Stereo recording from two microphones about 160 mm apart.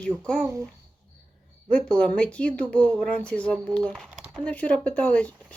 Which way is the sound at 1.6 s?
5° left (ahead or behind).